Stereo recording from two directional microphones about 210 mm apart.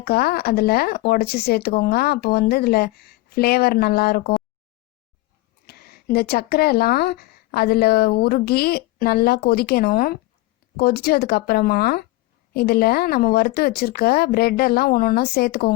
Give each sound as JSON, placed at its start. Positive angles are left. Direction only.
{"t": 0.0, "sound": "speech", "side_deg": 50}
{"t": 5.6, "sound": "speech", "side_deg": 45}